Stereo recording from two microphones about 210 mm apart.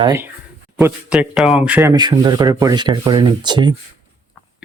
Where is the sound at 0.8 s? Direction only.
5° right (ahead or behind).